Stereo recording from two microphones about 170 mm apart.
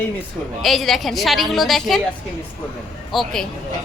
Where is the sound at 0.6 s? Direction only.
Centre (ahead or behind).